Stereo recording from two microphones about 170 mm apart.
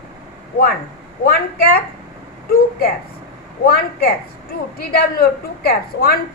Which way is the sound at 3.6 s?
65° left (ahead or behind).